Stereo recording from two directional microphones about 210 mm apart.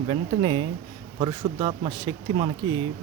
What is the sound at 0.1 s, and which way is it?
Speech, 20° right (ahead or behind).